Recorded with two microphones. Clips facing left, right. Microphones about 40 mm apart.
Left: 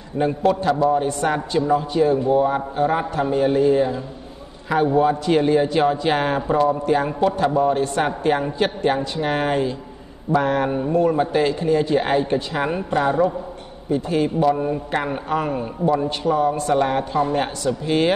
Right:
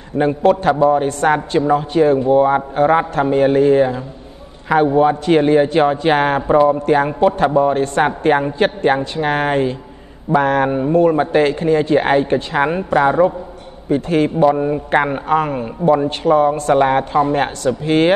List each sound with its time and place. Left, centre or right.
0.2 s a man's voice: right
7.7 s speech: right
13.8 s speech: right
14.4 s a man's voice: right
14.9 s speech: right
15.8 s a man's voice: right
16.3 s speech: right